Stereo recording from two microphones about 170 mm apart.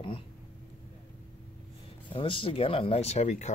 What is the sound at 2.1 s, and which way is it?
Speech, 30° left (ahead or behind).